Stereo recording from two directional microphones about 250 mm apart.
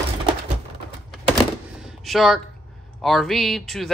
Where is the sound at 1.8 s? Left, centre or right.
Centre.